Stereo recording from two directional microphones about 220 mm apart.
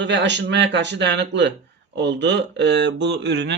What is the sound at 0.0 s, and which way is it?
Speech, 55° right (ahead or behind).